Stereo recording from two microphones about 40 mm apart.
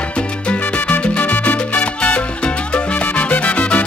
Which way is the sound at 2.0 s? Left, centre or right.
Left.